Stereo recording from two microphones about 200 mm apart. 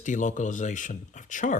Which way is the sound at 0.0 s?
40° left (ahead or behind).